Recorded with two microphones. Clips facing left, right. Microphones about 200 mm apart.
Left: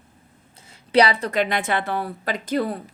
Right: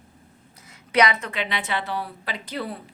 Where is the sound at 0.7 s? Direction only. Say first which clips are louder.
Left 3 dB; 30° left (ahead or behind).